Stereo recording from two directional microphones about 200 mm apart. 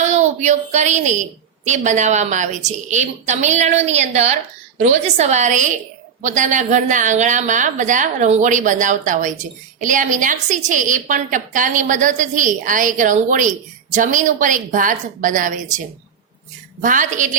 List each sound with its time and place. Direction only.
0.0 s a woman's voice: 35° right (ahead or behind)
16.8 s a woman's voice: 40° right (ahead or behind)